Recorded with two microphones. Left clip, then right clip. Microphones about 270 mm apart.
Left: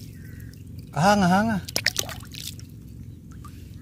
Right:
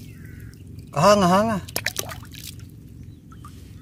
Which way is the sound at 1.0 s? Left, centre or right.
Right.